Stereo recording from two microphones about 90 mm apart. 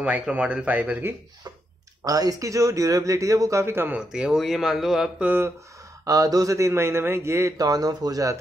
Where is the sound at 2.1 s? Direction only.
45° right (ahead or behind); by 3.9 s 25° right (ahead or behind).